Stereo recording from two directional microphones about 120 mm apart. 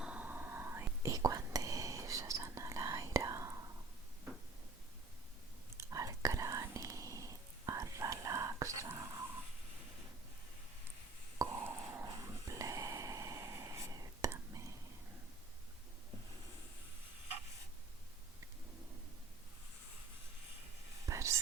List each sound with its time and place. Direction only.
0.0 s whispering: 10° right (ahead or behind)
5.7 s whispering: 25° right (ahead or behind)
11.3 s a sound: 30° right (ahead or behind)
12.0 s snort: 30° right (ahead or behind)
14.3 s whispering: 25° right (ahead or behind)
21.1 s whispering: 25° right (ahead or behind)